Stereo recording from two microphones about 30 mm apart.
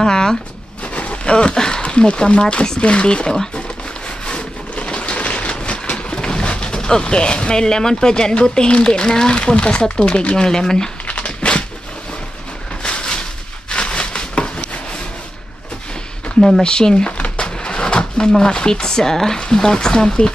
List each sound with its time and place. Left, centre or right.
0.0 s a sound: left
0.9 s speech: left
4.4 s a sound: left
6.7 s vehicle: left
7.1 s speech: left
9.4 s speech: left
10.0 s speech: left
10.3 s speech: left
11.1 s dog: left
13.7 s a sound: left
16.3 s speech: centre
16.6 s speech: left
17.2 s a sound: left
18.4 s speech: left